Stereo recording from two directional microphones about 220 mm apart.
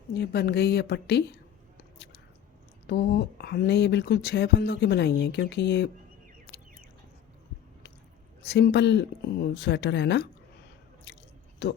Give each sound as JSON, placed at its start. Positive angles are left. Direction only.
{"t": 0.1, "sound": "speech", "side_deg": 45}
{"t": 2.8, "sound": "speech", "side_deg": 50}
{"t": 8.4, "sound": "speech", "side_deg": 50}
{"t": 11.1, "sound": "chewing", "side_deg": 50}
{"t": 11.6, "sound": "speech", "side_deg": 50}